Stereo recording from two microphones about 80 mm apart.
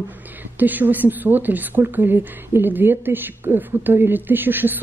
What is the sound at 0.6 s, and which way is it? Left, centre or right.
A woman's voice, right.